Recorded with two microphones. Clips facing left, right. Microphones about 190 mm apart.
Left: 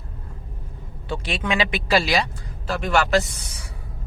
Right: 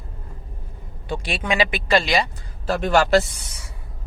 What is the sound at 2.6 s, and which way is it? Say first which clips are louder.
Speech: right 3 dB; 40° right (ahead or behind).